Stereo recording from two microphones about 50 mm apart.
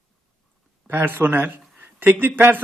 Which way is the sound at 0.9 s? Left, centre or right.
Right.